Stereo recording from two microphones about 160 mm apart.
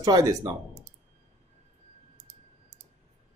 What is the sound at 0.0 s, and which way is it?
Speech, 20° right (ahead or behind).